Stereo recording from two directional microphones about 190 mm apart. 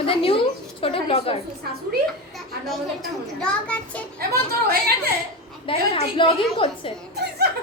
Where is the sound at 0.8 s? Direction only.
30° left (ahead or behind).